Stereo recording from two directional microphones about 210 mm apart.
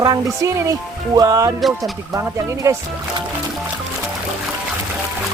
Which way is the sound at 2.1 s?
15° right (ahead or behind).